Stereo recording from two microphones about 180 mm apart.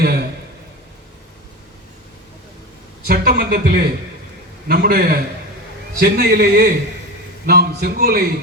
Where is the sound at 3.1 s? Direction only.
55° right (ahead or behind).